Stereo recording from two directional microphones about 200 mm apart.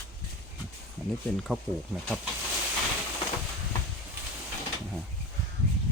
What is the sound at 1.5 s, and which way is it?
Speech, 5° right (ahead or behind).